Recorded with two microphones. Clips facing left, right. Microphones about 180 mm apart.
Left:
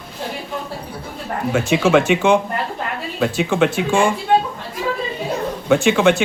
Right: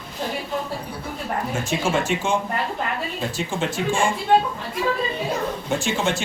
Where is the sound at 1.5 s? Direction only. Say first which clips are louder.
Left 10 dB; 70° left (ahead or behind).